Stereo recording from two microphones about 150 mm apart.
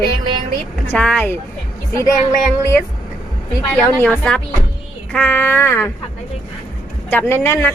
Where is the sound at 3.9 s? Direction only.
10° left (ahead or behind).